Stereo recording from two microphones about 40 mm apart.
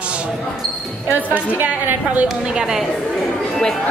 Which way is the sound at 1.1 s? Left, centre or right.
Right.